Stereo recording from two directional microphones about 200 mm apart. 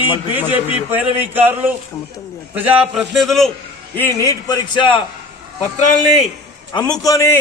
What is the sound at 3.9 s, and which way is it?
A man's voice, 15° left (ahead or behind).